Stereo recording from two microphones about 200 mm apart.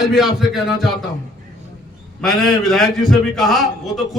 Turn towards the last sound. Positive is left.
turn(degrees=0)  # may be behind; listen again after turning